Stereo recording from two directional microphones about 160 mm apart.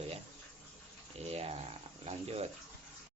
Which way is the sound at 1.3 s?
40° right (ahead or behind).